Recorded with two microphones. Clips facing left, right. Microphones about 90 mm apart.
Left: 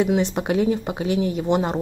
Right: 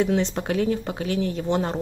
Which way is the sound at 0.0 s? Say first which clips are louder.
Left 2 dB; 10° left (ahead or behind).